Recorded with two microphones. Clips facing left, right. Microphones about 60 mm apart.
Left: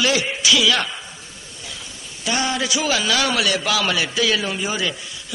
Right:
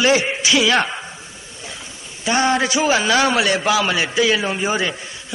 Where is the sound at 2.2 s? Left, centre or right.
Right.